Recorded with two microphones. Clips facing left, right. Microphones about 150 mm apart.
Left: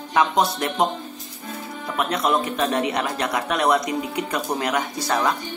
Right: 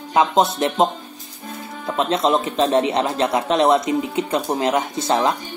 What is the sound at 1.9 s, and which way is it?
Speech, 25° right (ahead or behind).